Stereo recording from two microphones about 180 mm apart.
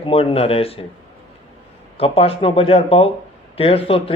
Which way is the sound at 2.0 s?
35° left (ahead or behind).